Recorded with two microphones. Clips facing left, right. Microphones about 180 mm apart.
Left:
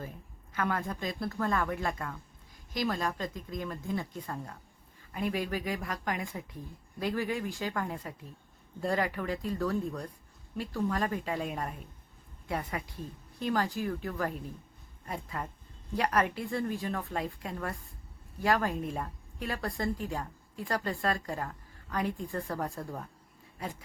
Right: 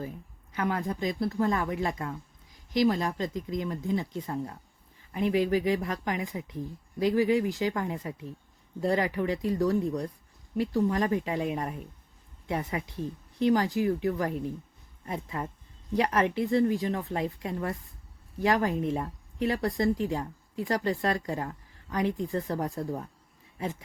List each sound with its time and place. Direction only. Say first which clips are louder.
0.5 s speech: right 3 dB; 20° right (ahead or behind)